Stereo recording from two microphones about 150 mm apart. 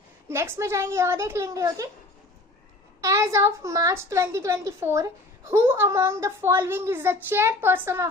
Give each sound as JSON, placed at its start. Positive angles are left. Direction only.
{"t": 0.3, "sound": "a woman's voice", "side_deg": -15}
{"t": 3.0, "sound": "a woman's voice", "side_deg": -20}